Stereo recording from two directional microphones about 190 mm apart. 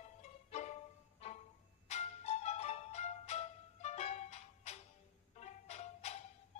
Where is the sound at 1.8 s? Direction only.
35° left (ahead or behind).